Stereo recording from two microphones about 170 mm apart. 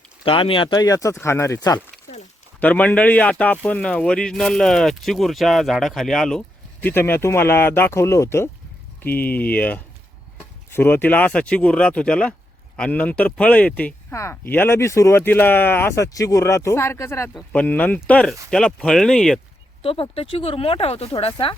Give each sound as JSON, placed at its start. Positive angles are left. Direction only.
{"t": 0.3, "sound": "speech", "side_deg": 30}
{"t": 2.6, "sound": "speech", "side_deg": 10}
{"t": 19.8, "sound": "speech", "side_deg": 35}